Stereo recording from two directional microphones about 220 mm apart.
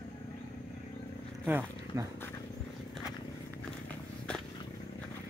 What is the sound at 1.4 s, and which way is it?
Speech, 10° right (ahead or behind).